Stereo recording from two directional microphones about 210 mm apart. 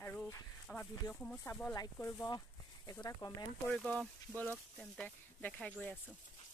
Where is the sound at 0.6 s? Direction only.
5° left (ahead or behind).